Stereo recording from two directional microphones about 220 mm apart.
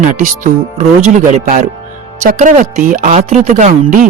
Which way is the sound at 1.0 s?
35° right (ahead or behind).